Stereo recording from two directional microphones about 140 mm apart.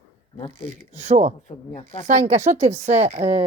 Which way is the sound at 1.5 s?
55° left (ahead or behind).